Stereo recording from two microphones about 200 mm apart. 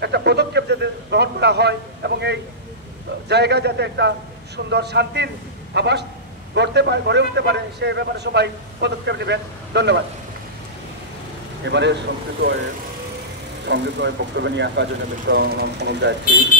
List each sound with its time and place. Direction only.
0.0 s a man's voice: 55° right (ahead or behind)
11.6 s a man's voice: 60° right (ahead or behind)
13.7 s a man's voice: 60° right (ahead or behind)